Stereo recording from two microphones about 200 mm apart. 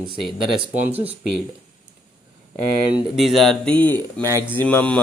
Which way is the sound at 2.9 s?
Centre (ahead or behind).